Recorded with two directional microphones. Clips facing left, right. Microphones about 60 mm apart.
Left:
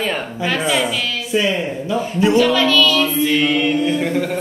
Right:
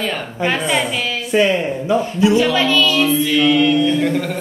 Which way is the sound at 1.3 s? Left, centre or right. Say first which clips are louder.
Right 4 dB; right.